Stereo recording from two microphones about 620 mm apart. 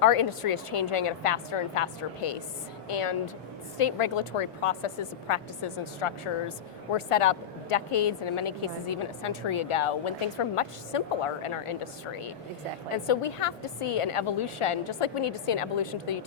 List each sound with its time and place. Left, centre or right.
0.0 s a woman's voice: left